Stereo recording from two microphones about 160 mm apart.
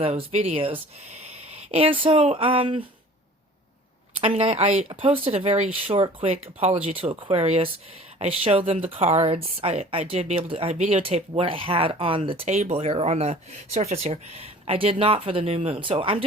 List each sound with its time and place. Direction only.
0.0 s speech: 40° right (ahead or behind)
4.2 s speech: 40° right (ahead or behind)